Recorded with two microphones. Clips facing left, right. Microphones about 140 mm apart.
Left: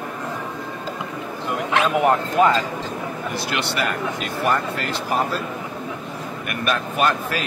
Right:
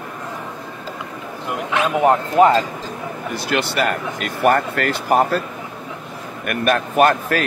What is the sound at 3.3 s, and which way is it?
A man's voice, 50° right (ahead or behind).